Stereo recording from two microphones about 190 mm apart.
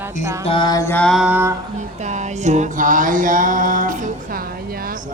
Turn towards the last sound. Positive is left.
turn(degrees=-45)  # may be behind; listen again after turning